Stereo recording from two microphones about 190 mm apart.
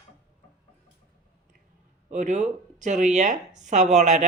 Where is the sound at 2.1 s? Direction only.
40° right (ahead or behind).